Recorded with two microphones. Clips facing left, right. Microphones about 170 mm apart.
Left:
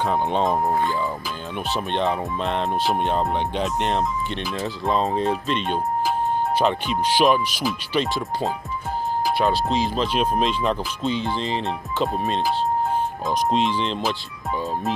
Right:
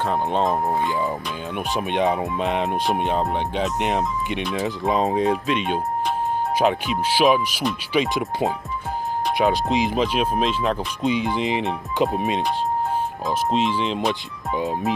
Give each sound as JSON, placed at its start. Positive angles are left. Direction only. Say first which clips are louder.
{"t": 0.0, "sound": "speech", "louder": "even", "side_deg": 0}
{"t": 0.9, "sound": "music", "louder": "right 2 dB", "side_deg": -10}
{"t": 2.8, "sound": "speech", "louder": "even", "side_deg": 0}
{"t": 4.6, "sound": "music", "louder": "right 1 dB", "side_deg": -15}
{"t": 5.2, "sound": "speech", "louder": "right 2 dB", "side_deg": -5}
{"t": 6.6, "sound": "music", "louder": "right 1 dB", "side_deg": -5}
{"t": 11.0, "sound": "music", "louder": "right 3 dB", "side_deg": -15}
{"t": 13.3, "sound": "speech", "louder": "even", "side_deg": 0}